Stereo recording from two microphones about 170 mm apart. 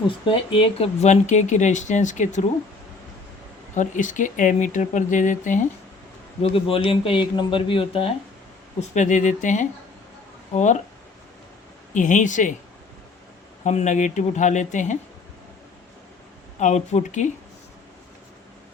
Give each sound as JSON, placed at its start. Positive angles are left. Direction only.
{"t": 0.1, "sound": "speech", "side_deg": 30}
{"t": 3.8, "sound": "speech", "side_deg": 50}
{"t": 6.4, "sound": "speech", "side_deg": 30}
{"t": 8.8, "sound": "speech", "side_deg": 45}
{"t": 11.9, "sound": "speech", "side_deg": 45}
{"t": 13.7, "sound": "speech", "side_deg": 45}
{"t": 16.6, "sound": "speech", "side_deg": 45}